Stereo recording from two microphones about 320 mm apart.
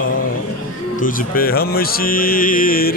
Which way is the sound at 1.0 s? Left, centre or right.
Left.